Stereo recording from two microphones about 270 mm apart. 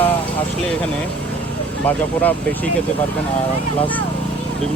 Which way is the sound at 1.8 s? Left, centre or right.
Centre.